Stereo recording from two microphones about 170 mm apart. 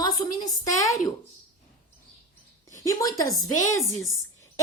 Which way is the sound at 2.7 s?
20° left (ahead or behind).